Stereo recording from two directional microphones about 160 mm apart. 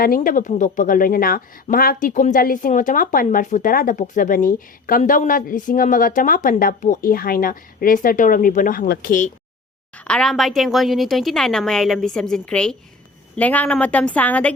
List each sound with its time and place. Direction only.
0.0 s speech: 60° left (ahead or behind)
10.0 s a woman's voice: 5° left (ahead or behind)